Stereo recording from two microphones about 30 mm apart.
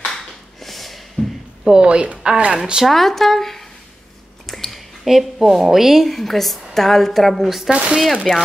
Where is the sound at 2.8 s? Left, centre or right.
Centre.